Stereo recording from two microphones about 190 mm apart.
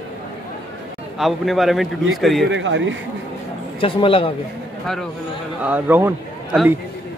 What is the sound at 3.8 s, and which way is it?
Speech, 30° left (ahead or behind).